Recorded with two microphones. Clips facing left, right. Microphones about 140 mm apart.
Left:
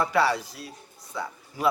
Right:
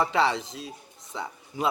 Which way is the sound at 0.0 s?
25° right (ahead or behind).